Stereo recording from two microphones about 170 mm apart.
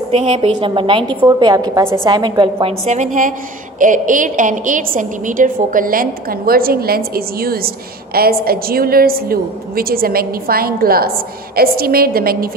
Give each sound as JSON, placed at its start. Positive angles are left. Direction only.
{"t": 0.1, "sound": "a woman's voice", "side_deg": -35}